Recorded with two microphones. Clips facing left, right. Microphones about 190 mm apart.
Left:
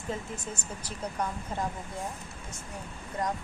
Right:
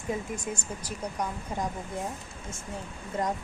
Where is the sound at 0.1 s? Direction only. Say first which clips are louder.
Right 4 dB; 10° right (ahead or behind).